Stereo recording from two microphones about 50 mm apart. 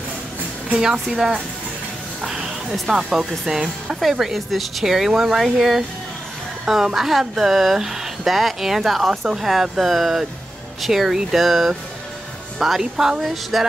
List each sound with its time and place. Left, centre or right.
0.7 s speech: centre
2.2 s a sound: centre
2.7 s speech: centre
12.9 s speech: centre
13.2 s speech: centre